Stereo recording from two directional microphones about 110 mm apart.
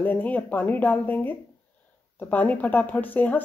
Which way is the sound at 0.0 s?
15° left (ahead or behind).